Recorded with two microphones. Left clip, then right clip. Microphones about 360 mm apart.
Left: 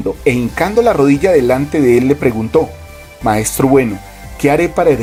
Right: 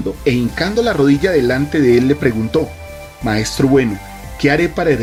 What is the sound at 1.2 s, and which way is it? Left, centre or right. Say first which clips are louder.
Speech: left 4 dB; left.